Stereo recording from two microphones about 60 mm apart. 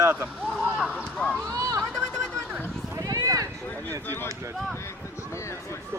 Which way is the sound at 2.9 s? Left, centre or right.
Right.